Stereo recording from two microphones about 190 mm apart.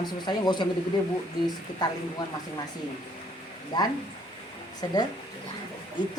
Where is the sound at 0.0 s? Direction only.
25° left (ahead or behind).